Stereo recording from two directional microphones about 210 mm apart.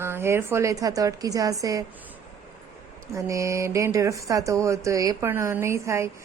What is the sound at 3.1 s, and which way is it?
Speech, 15° right (ahead or behind).